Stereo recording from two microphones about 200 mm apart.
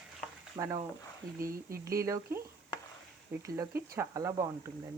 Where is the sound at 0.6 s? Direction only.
15° right (ahead or behind).